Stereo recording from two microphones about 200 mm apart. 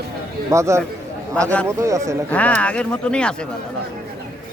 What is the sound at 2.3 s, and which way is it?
Speech, 5° left (ahead or behind).